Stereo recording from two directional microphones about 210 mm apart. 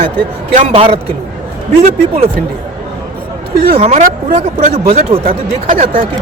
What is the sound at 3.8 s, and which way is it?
Speech, 35° right (ahead or behind).